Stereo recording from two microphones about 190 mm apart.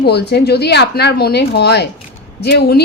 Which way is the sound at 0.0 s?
60° left (ahead or behind).